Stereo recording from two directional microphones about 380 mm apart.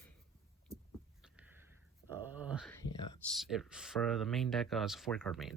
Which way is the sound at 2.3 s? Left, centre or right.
Centre.